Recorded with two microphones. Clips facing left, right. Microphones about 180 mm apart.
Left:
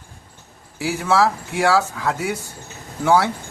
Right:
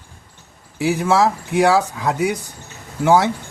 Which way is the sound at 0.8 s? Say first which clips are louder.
Right 2 dB; 20° right (ahead or behind).